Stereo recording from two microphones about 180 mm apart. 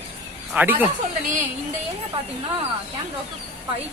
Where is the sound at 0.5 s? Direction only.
10° right (ahead or behind).